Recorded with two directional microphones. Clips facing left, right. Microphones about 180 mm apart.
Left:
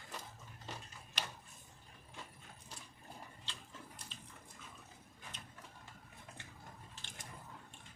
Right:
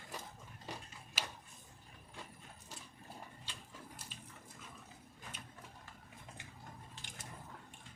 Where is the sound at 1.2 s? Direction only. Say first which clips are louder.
Even; 5° right (ahead or behind).